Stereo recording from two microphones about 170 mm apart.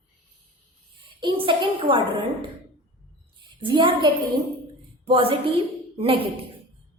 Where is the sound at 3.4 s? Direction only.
30° right (ahead or behind).